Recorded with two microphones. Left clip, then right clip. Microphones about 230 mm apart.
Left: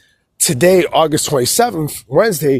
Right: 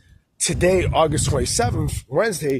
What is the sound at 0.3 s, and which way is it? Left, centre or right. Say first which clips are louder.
A man's voice: left 7 dB; left.